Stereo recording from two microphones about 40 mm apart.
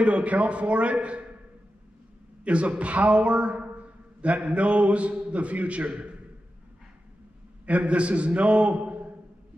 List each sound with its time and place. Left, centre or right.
0.0 s a man's voice: right
2.4 s a man's voice: right
7.6 s a man's voice: right